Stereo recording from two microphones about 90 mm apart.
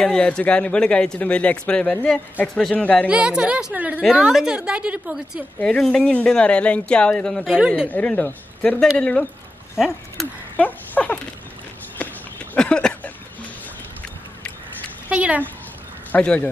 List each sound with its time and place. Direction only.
0.0 s speech: 10° left (ahead or behind)
3.1 s a woman's voice: 10° right (ahead or behind)
5.8 s speech: 5° left (ahead or behind)
7.4 s a woman's voice: 5° right (ahead or behind)
7.9 s speech: 15° left (ahead or behind)
10.5 s speech: 20° left (ahead or behind)
12.0 s a sound: 15° left (ahead or behind)
15.0 s speech: 15° right (ahead or behind)
16.1 s speech: 10° left (ahead or behind)